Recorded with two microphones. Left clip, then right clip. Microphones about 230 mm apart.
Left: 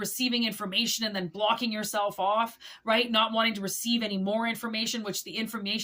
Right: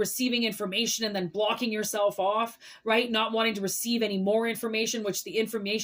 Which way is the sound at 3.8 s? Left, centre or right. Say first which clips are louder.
Right 1 dB; centre.